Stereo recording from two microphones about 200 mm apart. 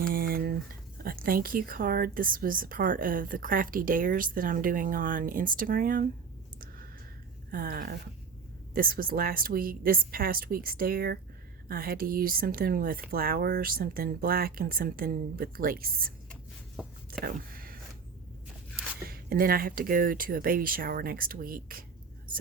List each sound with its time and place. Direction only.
0.1 s a sound: 50° right (ahead or behind)
1.0 s speech: 45° right (ahead or behind)
7.5 s speech: 45° right (ahead or behind)
16.8 s speech: 5° right (ahead or behind)
17.2 s a sound: 45° right (ahead or behind)
19.0 s speech: 50° right (ahead or behind)